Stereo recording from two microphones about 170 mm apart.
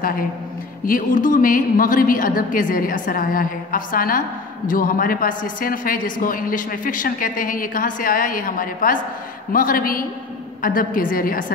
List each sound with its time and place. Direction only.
0.8 s a woman's voice: 55° left (ahead or behind)